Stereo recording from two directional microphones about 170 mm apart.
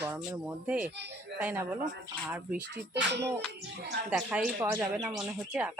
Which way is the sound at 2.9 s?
85° right.